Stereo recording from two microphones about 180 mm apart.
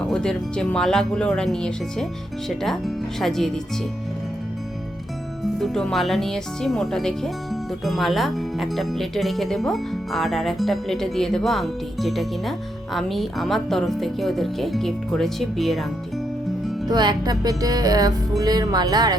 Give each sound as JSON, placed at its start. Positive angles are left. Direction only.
{"t": 0.0, "sound": "speech", "side_deg": 5}
{"t": 5.4, "sound": "speech", "side_deg": 0}
{"t": 16.9, "sound": "music", "side_deg": -25}